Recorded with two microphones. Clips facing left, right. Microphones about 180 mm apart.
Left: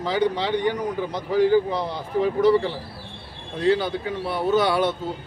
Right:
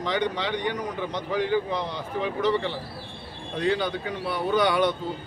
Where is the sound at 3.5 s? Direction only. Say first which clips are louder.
Left 4 dB; 30° left (ahead or behind).